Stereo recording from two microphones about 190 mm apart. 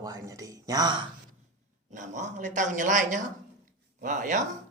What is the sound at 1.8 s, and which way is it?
A woman's voice, 40° right (ahead or behind).